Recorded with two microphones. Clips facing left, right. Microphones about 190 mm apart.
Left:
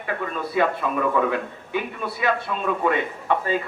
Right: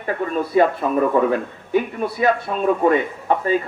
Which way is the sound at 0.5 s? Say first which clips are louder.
Right 5 dB; 40° right (ahead or behind).